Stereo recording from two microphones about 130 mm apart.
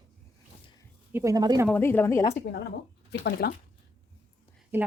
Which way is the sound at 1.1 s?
25° right (ahead or behind).